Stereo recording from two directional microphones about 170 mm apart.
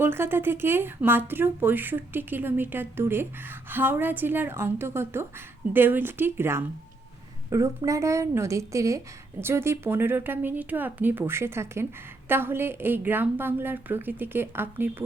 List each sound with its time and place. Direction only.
0.0 s speech: 15° right (ahead or behind)